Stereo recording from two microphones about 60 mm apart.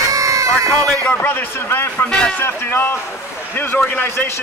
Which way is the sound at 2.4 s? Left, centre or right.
Left.